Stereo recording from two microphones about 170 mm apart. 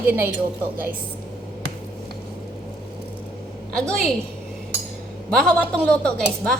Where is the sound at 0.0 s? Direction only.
10° right (ahead or behind).